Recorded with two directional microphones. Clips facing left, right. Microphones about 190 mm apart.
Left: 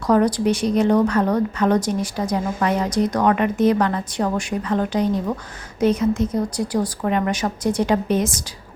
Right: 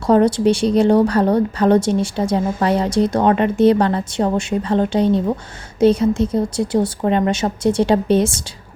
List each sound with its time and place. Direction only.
0.1 s speech: 25° right (ahead or behind)